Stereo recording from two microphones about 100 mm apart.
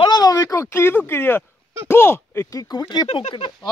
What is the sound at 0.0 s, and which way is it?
Speech, 40° left (ahead or behind).